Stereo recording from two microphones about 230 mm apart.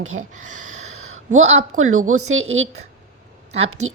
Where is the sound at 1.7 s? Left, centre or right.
Right.